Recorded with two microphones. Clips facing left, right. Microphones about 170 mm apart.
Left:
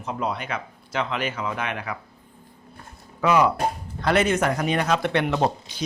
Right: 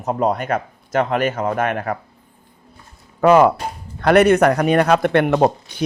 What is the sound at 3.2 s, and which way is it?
Speech, 55° right (ahead or behind).